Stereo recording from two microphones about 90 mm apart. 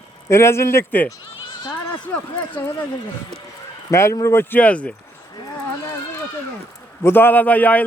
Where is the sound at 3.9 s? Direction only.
30° left (ahead or behind); by 4.9 s 15° left (ahead or behind).